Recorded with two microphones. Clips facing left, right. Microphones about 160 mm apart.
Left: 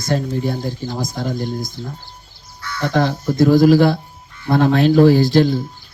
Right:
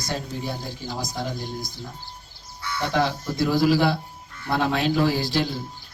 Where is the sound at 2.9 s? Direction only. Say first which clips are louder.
Left 7 dB; 50° left (ahead or behind).